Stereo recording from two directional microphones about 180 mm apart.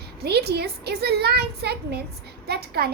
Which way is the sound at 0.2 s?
65° right (ahead or behind).